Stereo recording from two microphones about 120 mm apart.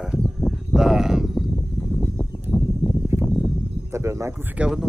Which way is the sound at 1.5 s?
15° left (ahead or behind).